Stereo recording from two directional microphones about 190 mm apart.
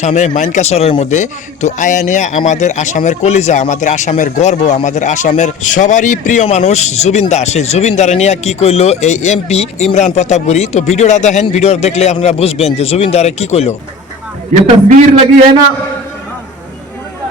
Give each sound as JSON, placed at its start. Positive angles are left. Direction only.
{"t": 0.0, "sound": "speech", "side_deg": 40}
{"t": 14.5, "sound": "a man's voice", "side_deg": -35}